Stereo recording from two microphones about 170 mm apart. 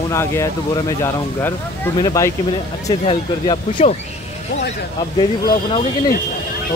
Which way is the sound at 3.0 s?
35° left (ahead or behind).